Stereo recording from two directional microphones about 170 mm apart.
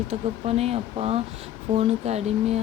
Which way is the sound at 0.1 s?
35° right (ahead or behind).